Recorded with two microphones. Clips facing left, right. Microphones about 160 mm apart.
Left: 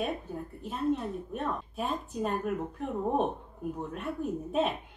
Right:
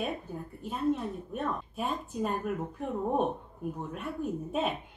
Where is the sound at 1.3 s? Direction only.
Centre (ahead or behind).